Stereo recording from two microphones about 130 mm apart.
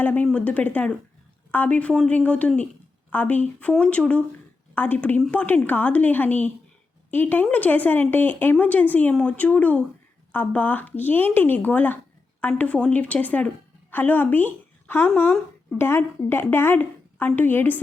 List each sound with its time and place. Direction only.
0.0 s a woman's voice: 10° left (ahead or behind)